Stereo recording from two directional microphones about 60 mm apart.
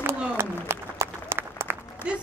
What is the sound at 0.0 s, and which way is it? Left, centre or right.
Applause, right.